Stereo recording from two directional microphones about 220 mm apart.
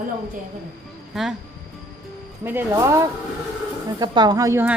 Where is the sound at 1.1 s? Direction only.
Centre (ahead or behind).